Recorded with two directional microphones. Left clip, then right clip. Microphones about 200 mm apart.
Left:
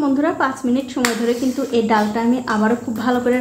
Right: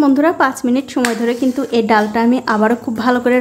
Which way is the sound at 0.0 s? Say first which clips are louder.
Right 5 dB; 30° right (ahead or behind).